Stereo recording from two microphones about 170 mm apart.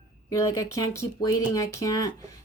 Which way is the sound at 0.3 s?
20° left (ahead or behind).